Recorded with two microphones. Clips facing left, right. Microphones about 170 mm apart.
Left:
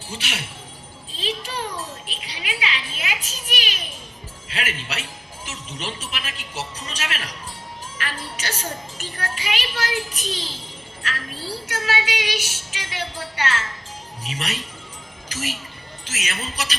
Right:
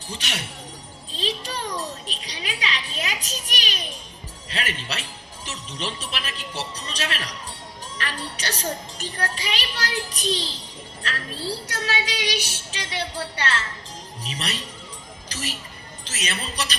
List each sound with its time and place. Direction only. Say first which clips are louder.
0.1 s a child's voice: even; 40° right (ahead or behind)
11.0 s a sound: even; 40° right (ahead or behind)
11.4 s a child's voice: left 1 dB; 35° right (ahead or behind)